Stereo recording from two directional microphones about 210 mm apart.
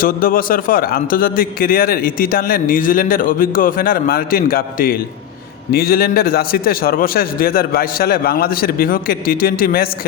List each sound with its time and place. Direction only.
0.0 s a man's voice: 45° left (ahead or behind)